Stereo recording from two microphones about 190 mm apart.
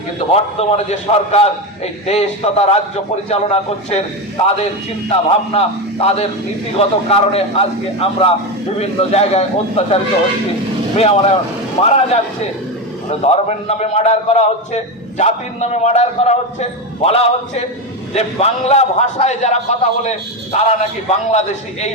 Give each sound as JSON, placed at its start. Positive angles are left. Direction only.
{"t": 0.3, "sound": "a man's voice", "side_deg": 35}
{"t": 5.5, "sound": "a man's voice", "side_deg": 30}